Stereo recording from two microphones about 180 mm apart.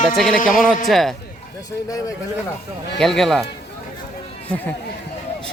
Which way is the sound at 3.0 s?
Centre (ahead or behind).